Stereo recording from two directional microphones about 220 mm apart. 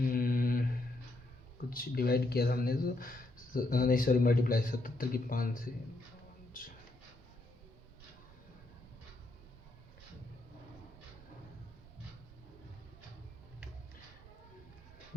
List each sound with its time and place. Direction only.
0.0 s mantra: 40° left (ahead or behind)
1.7 s a man's voice: 40° left (ahead or behind)